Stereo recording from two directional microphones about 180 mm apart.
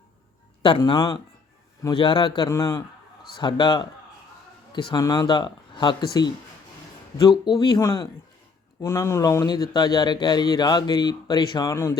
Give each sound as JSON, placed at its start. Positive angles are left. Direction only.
{"t": 0.6, "sound": "a man's voice", "side_deg": 25}
{"t": 7.2, "sound": "a man's voice", "side_deg": 20}